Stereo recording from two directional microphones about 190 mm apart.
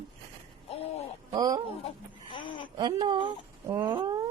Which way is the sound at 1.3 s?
20° right (ahead or behind).